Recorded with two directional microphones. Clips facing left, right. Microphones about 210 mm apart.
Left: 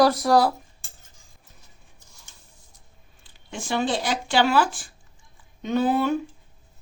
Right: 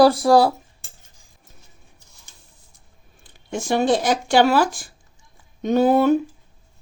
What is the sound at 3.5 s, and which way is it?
Speech, 45° right (ahead or behind).